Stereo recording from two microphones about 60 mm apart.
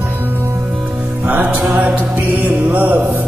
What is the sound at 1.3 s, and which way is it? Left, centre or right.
Music, right.